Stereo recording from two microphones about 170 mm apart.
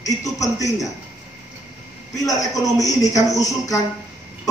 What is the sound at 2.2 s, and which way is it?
A woman's voice, 20° left (ahead or behind).